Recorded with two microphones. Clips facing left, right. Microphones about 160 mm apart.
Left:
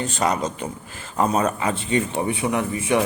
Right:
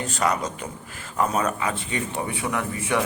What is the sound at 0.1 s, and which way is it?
Speech, 25° left (ahead or behind).